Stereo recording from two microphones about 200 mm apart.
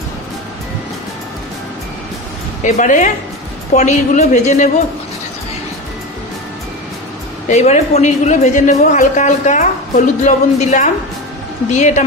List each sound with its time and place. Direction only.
2.6 s speech: 40° left (ahead or behind)
7.4 s speech: 35° left (ahead or behind)